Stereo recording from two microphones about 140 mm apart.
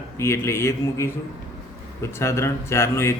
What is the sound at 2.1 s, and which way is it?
Speech, 20° left (ahead or behind).